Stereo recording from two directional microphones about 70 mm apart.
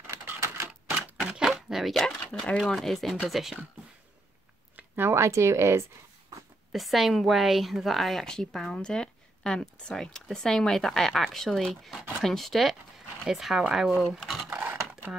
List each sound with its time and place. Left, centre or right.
0.0 s typewriter: right
1.2 s speech: centre
4.7 s speech: right
6.7 s speech: centre
14.5 s computer keyboard: right